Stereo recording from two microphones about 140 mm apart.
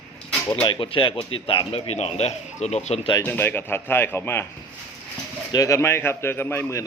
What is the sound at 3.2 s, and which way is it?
Speech, 15° left (ahead or behind).